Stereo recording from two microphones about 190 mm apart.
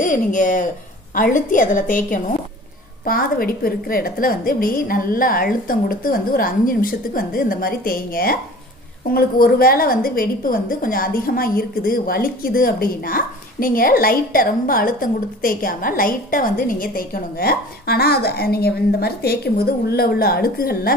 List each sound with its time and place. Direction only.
0.0 s a woman's voice: 45° left (ahead or behind)